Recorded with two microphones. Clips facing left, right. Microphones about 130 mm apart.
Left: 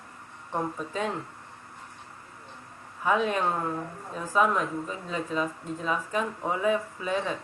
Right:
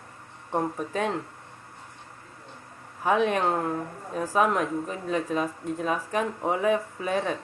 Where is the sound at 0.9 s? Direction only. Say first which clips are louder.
Right 3 dB; 50° right (ahead or behind).